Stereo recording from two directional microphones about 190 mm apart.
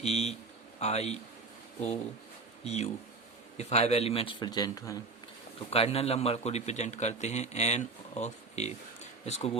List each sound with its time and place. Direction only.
0.0 s a man's voice: 35° left (ahead or behind)
2.6 s a man's voice: 35° left (ahead or behind); by 4.9 s 20° left (ahead or behind)
5.7 s a man's voice: 30° left (ahead or behind)